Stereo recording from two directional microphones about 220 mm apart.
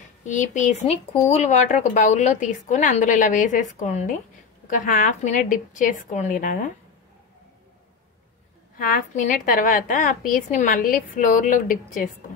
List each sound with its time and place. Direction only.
0.3 s speech: 35° left (ahead or behind)
8.7 s speech: 40° left (ahead or behind)